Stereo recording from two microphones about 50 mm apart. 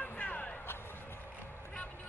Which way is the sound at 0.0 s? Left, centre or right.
Left.